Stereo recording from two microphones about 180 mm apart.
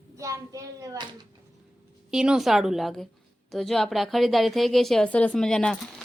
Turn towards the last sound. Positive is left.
turn(degrees=5)  # may be behind; listen again after turning